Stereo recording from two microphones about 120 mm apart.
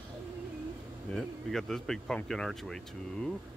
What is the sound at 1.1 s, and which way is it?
Speech, 5° left (ahead or behind).